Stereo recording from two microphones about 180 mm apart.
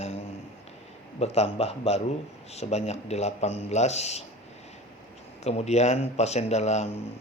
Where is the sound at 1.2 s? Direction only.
35° left (ahead or behind).